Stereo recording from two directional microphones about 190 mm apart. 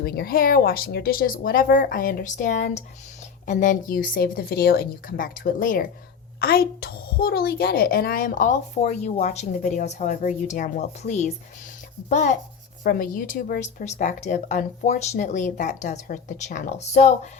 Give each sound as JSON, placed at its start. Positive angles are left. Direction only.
{"t": 0.0, "sound": "a woman's voice", "side_deg": 55}